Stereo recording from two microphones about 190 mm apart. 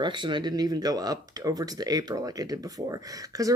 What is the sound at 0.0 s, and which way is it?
Speech, 25° right (ahead or behind).